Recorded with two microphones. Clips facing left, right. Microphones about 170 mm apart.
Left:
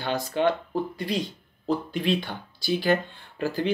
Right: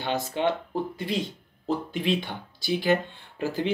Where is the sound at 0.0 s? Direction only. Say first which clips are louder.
Left 2 dB; 20° right (ahead or behind).